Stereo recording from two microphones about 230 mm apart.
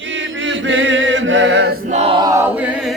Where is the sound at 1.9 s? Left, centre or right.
Right; by 2.9 s centre.